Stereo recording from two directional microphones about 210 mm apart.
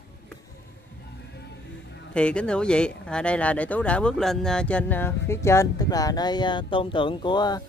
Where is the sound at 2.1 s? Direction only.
5° left (ahead or behind).